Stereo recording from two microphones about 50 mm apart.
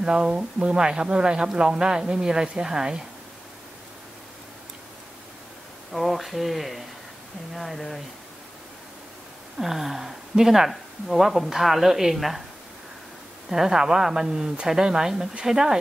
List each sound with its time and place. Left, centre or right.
0.0 s speech: centre
5.9 s speech: centre
9.6 s speech: centre
13.5 s speech: centre